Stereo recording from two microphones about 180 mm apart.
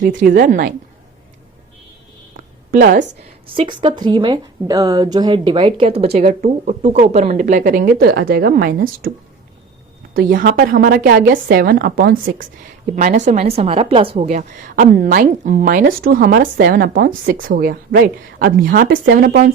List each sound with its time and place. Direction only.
0.3 s a woman's voice: 50° right (ahead or behind)
2.3 s a sound: 50° right (ahead or behind)
3.4 s a woman's voice: 30° right (ahead or behind); by 9.1 s 55° right (ahead or behind)
10.2 s a woman's voice: 55° right (ahead or behind)
13.0 s a woman's voice: 45° right (ahead or behind)